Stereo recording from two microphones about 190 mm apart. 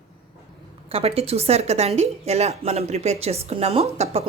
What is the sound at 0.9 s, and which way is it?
A woman's voice, 30° right (ahead or behind).